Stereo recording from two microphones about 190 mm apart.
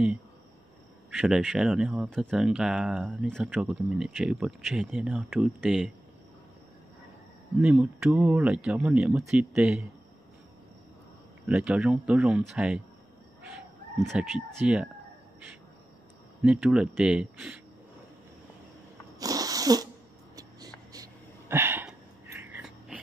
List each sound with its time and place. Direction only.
1.1 s speech: 5° right (ahead or behind)
7.6 s speech: 5° right (ahead or behind)
11.4 s speech: 5° right (ahead or behind)
14.0 s speech: 5° right (ahead or behind)
16.4 s speech: 5° right (ahead or behind)
19.1 s a sound: 20° right (ahead or behind)